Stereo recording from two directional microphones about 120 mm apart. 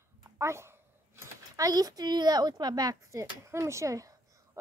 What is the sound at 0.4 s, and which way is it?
A woman's voice, 20° right (ahead or behind).